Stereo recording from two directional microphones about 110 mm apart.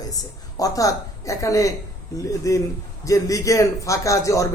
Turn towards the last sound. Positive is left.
turn(degrees=30)  # may be behind; listen again after turning